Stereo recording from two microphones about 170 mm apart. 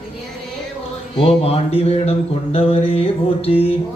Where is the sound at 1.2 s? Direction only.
35° left (ahead or behind).